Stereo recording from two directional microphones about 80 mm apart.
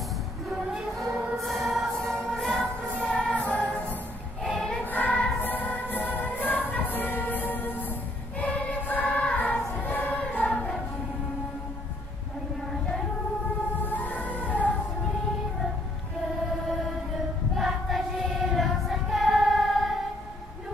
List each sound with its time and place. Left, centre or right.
0.9 s choir: centre
2.0 s music: centre
4.4 s choir: centre
4.9 s choir: centre
5.4 s music: left
8.4 s choir: centre
13.7 s music: left
17.6 s choir: centre